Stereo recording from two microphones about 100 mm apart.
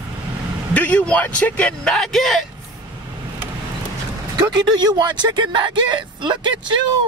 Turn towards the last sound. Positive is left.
turn(degrees=-50)  # may be behind; listen again after turning